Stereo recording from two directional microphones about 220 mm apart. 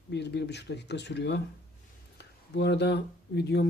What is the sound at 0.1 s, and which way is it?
Speech, 50° left (ahead or behind).